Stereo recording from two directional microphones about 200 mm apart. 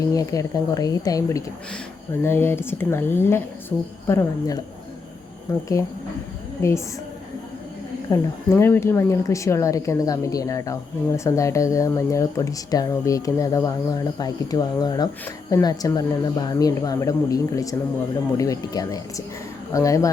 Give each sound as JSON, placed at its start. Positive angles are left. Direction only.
{"t": 0.1, "sound": "speech", "side_deg": 15}
{"t": 8.1, "sound": "speech", "side_deg": 15}